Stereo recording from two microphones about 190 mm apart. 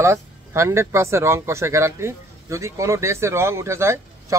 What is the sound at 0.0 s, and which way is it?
A man's voice, 15° right (ahead or behind).